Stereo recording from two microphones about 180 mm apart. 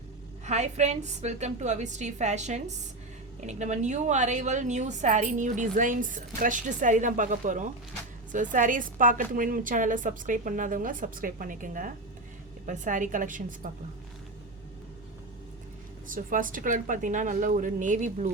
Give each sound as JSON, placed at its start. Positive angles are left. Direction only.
{"t": 0.4, "sound": "a woman's voice", "side_deg": -40}
{"t": 16.0, "sound": "a woman's voice", "side_deg": -50}